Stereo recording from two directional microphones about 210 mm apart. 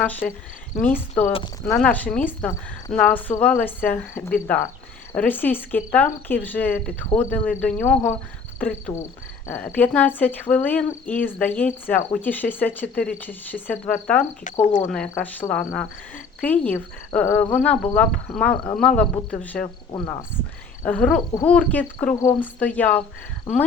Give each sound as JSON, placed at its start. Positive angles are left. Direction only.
{"t": 0.0, "sound": "speech", "side_deg": 5}
{"t": 1.3, "sound": "speech", "side_deg": 20}
{"t": 1.8, "sound": "speech", "side_deg": 5}
{"t": 14.6, "sound": "speech", "side_deg": 35}
{"t": 14.8, "sound": "speech", "side_deg": 5}
{"t": 19.9, "sound": "speech", "side_deg": 20}
{"t": 20.8, "sound": "speech", "side_deg": 5}